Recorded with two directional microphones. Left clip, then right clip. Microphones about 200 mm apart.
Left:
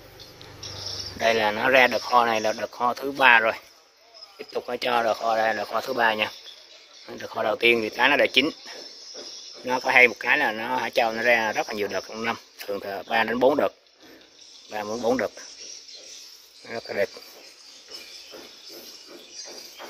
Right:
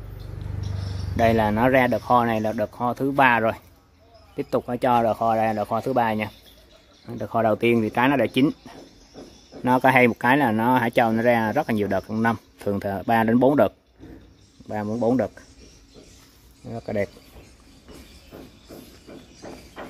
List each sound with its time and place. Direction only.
1.2 s speech: 5° right (ahead or behind)
4.6 s speech: 10° right (ahead or behind)
14.9 s speech: centre (ahead or behind)